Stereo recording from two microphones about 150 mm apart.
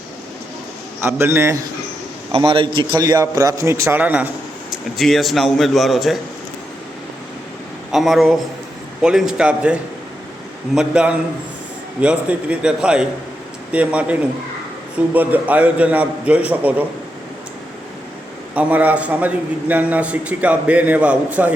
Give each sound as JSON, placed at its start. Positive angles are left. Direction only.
{"t": 1.0, "sound": "a man's voice", "side_deg": -15}
{"t": 2.3, "sound": "a man's voice", "side_deg": -35}
{"t": 4.9, "sound": "a man's voice", "side_deg": 0}
{"t": 7.9, "sound": "a man's voice", "side_deg": 0}
{"t": 18.5, "sound": "a man's voice", "side_deg": -10}